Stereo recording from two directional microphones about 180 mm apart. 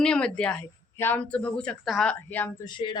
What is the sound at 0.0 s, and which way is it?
Speech, 5° left (ahead or behind).